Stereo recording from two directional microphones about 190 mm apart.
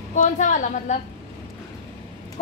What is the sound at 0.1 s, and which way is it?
Speech, 40° left (ahead or behind).